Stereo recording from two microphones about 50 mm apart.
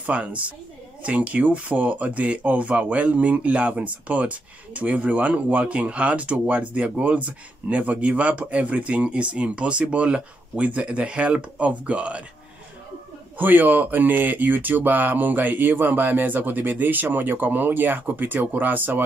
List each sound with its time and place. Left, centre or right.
0.0 s speech: right
13.4 s speech: right